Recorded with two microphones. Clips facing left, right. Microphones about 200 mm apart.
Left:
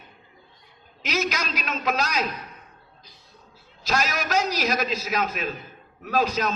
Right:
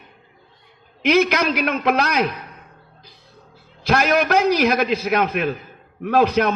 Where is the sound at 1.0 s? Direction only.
60° right (ahead or behind).